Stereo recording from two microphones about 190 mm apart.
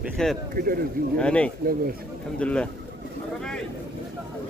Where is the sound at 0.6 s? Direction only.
55° right (ahead or behind).